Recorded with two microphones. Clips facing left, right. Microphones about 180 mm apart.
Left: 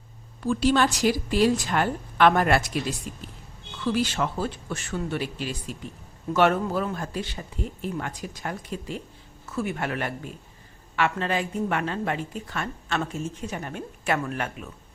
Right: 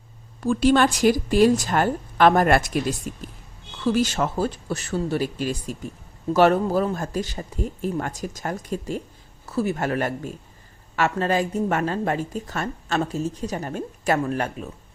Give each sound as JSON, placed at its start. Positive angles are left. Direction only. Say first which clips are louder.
{"t": 0.4, "sound": "a woman's voice", "louder": "right 4 dB", "side_deg": -50}